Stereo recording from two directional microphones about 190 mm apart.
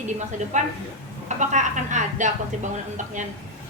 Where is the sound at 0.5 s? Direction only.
40° right (ahead or behind).